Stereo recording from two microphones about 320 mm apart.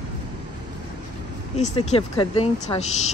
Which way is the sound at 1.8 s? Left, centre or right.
Centre.